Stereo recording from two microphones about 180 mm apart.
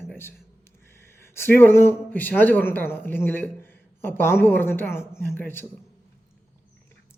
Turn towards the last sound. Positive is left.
turn(degrees=10)  # may be behind; listen again after turning